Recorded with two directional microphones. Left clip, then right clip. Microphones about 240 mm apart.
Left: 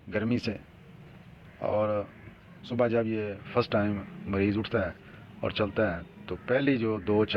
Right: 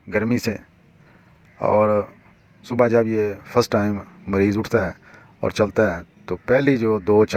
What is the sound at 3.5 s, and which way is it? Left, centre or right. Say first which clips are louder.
Speech: right 9 dB; right.